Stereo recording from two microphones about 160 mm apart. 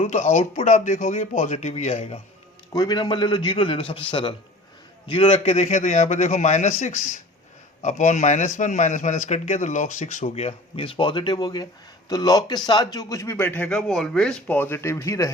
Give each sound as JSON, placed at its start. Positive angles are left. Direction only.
{"t": 0.0, "sound": "a man's voice", "side_deg": 45}
{"t": 2.7, "sound": "a man's voice", "side_deg": 25}
{"t": 10.3, "sound": "a man's voice", "side_deg": 35}